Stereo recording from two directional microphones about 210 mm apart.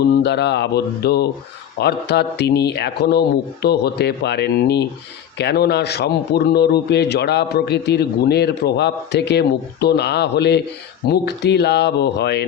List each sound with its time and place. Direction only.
0.0 s a man's voice: 50° left (ahead or behind)